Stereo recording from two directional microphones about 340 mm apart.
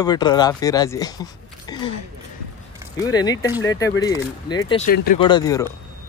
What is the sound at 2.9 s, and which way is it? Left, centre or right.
Speech, centre.